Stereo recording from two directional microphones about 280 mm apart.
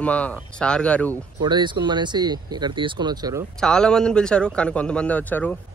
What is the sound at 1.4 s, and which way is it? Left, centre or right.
Speech, centre.